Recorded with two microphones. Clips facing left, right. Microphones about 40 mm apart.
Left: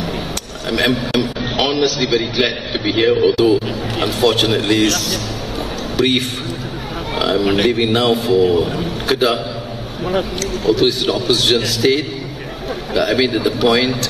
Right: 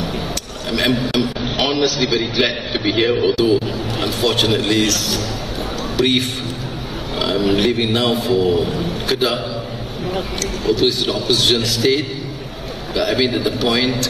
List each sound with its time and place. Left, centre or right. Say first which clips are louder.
0.7 s a man's voice: left 1 dB; left
3.0 s a man's voice: left 4 dB; centre
3.3 s a man's voice: left 2 dB; left
10.6 s a man's voice: left 2 dB; left